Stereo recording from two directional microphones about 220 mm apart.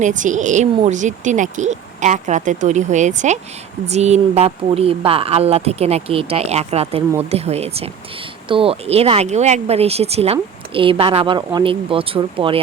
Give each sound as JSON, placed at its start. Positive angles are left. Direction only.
{"t": 0.0, "sound": "speech", "side_deg": -35}